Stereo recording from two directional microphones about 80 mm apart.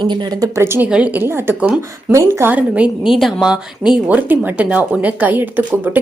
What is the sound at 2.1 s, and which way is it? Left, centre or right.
Speech, right.